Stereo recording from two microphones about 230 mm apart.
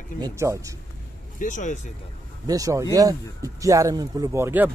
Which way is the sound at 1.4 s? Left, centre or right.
Left.